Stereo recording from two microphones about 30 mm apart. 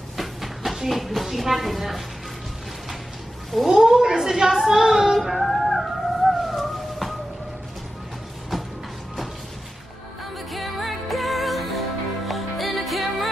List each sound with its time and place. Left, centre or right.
0.2 s a sound: centre
0.8 s a woman's voice: centre
3.6 s child singing: centre
5.2 s music: centre
10.5 s music: centre